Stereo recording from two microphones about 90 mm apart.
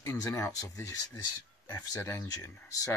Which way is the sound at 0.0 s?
40° left (ahead or behind).